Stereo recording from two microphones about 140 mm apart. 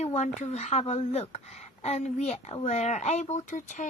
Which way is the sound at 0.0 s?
50° left (ahead or behind).